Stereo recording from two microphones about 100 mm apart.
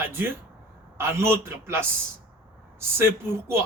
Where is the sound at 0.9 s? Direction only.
25° right (ahead or behind).